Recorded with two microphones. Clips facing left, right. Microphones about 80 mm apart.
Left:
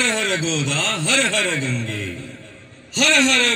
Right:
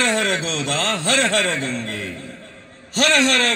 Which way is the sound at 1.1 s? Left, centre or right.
Centre.